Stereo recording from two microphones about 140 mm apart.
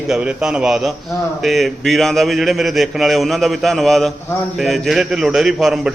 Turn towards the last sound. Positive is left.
turn(degrees=0)  # may be behind; listen again after turning